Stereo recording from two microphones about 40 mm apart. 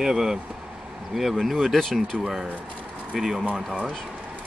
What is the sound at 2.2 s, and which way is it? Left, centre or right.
Speech, centre.